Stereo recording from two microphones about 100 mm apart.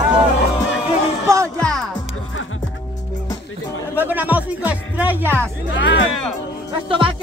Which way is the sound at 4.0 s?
20° right (ahead or behind).